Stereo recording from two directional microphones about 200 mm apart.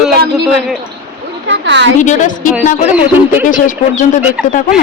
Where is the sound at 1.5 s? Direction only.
65° right (ahead or behind).